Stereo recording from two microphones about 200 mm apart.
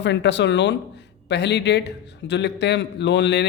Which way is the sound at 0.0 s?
60° left (ahead or behind).